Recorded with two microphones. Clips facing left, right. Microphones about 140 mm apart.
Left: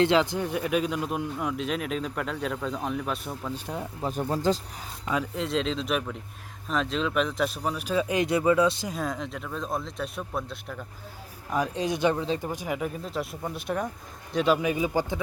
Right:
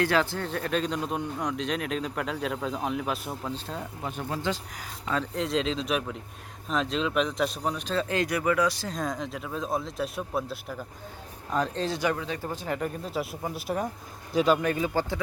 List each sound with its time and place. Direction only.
0.0 s speech: 20° left (ahead or behind); by 3.5 s 5° right (ahead or behind)
3.5 s speech: 15° left (ahead or behind)
4.0 s speech: 40° left (ahead or behind)
5.0 s speech: 5° left (ahead or behind); by 8.9 s 25° left (ahead or behind)
8.9 s speech: 5° left (ahead or behind)
11.5 s speech: 10° left (ahead or behind)
12.4 s speech: 15° left (ahead or behind)